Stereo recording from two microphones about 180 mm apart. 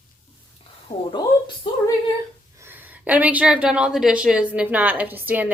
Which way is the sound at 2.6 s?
10° right (ahead or behind).